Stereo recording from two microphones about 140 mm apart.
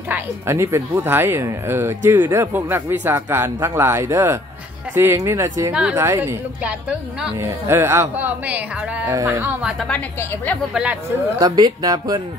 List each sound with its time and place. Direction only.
0.1 s speech: 20° right (ahead or behind)
5.7 s speech: 5° right (ahead or behind)
9.1 s speech: 20° right (ahead or behind); by 9.8 s 5° right (ahead or behind)
9.8 s a woman's voice: 10° left (ahead or behind)
10.7 s speech: 10° right (ahead or behind)
11.3 s speech: 30° right (ahead or behind)